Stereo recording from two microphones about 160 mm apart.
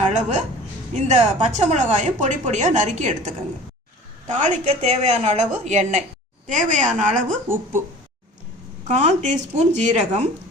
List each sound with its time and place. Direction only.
0.1 s a woman's voice: 45° right (ahead or behind)
8.9 s a woman's voice: 50° right (ahead or behind)